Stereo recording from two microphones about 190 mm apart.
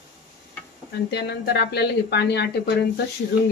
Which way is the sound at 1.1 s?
60° left (ahead or behind).